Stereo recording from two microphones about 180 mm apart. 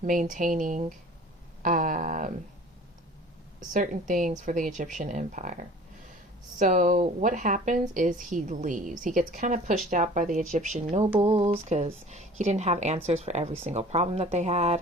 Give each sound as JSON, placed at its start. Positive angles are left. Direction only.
{"t": 0.0, "sound": "speech", "side_deg": -45}
{"t": 3.7, "sound": "speech", "side_deg": -45}